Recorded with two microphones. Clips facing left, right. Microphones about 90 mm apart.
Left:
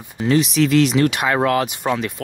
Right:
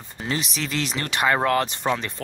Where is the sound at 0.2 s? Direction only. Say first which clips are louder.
Left 12 dB; centre (ahead or behind).